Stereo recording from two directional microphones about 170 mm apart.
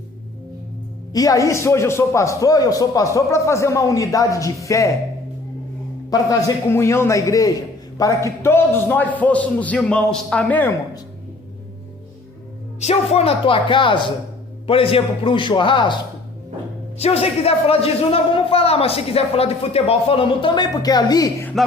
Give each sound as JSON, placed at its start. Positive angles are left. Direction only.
{"t": 1.1, "sound": "a man's voice", "side_deg": 20}
{"t": 6.1, "sound": "a man's voice", "side_deg": 20}
{"t": 12.8, "sound": "a man's voice", "side_deg": 40}
{"t": 17.0, "sound": "speech", "side_deg": 35}